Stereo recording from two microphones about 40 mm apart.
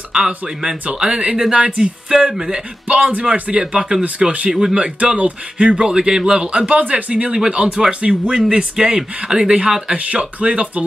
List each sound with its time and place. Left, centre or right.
0.1 s speech: centre
1.1 s speech: right
1.5 s speech: centre
2.9 s speech: right
6.8 s speech: right